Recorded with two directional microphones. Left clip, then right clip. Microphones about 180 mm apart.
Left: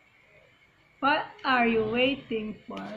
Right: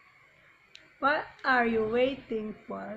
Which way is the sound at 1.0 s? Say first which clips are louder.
Left 2 dB; 30° right (ahead or behind).